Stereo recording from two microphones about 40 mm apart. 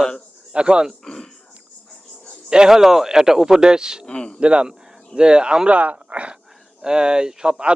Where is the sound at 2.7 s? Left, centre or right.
Centre.